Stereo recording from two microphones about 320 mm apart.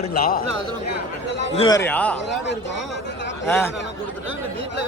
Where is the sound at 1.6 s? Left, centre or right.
Centre.